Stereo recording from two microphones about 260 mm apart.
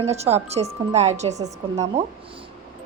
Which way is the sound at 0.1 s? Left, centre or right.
Right.